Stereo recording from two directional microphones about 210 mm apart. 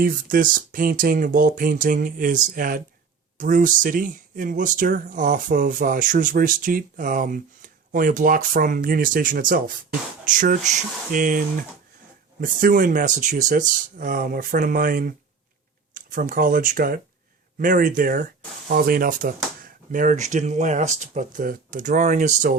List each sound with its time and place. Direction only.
0.0 s speech: 40° right (ahead or behind)